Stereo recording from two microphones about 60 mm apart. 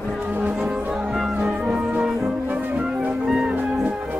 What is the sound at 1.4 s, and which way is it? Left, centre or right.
Music, centre.